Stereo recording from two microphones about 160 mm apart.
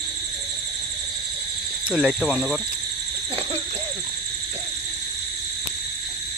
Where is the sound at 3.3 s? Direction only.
35° right (ahead or behind).